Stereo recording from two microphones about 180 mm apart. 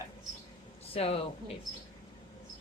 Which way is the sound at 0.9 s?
35° left (ahead or behind).